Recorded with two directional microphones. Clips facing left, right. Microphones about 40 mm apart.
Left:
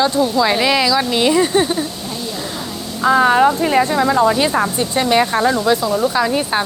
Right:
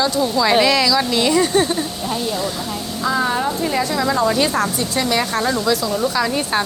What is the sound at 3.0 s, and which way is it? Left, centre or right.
Speech, left.